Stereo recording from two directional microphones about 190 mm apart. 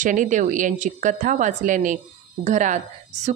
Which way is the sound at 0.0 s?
40° right (ahead or behind).